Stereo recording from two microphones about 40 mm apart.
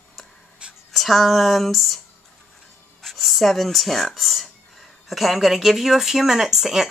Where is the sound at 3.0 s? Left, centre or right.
Centre.